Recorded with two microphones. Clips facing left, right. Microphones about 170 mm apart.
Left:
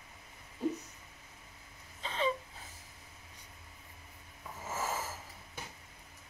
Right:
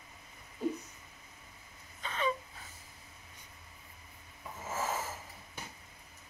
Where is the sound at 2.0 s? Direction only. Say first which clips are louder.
Left 1 dB; 30° left (ahead or behind).